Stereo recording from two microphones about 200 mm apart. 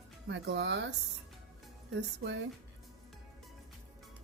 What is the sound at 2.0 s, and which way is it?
Speech, 60° right (ahead or behind).